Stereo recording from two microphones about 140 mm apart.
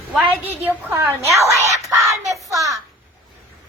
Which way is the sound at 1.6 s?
50° right (ahead or behind).